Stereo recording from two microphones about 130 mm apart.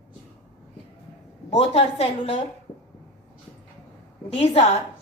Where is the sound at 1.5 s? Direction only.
55° left (ahead or behind).